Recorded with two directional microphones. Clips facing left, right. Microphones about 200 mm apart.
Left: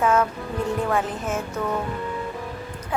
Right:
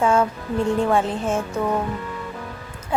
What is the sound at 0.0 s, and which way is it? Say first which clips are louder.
Music: right 2 dB; 30° right (ahead or behind).